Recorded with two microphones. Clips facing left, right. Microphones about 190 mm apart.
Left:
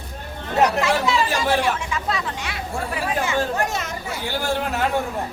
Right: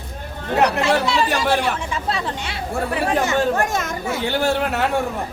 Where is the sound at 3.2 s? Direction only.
45° right (ahead or behind).